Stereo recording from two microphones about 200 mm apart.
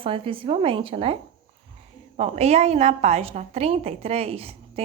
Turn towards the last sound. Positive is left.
turn(degrees=-30)  # may be behind; listen again after turning